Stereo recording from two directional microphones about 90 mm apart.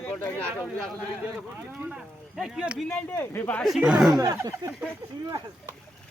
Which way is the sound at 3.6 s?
5° right (ahead or behind).